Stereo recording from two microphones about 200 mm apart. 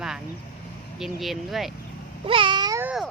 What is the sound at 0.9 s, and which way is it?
Speech, centre (ahead or behind).